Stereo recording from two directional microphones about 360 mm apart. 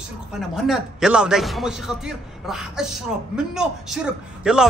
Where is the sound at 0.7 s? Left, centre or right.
Centre.